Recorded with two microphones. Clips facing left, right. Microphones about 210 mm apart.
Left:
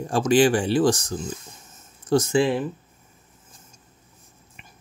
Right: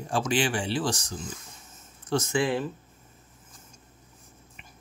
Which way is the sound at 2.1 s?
35° left (ahead or behind).